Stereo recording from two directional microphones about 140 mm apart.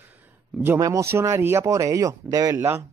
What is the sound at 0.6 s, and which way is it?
Speech, 20° right (ahead or behind).